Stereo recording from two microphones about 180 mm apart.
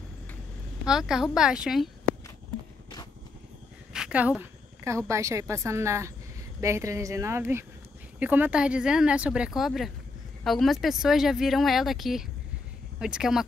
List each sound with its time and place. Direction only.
0.8 s speech: 5° right (ahead or behind)
3.9 s a woman's voice: 5° right (ahead or behind)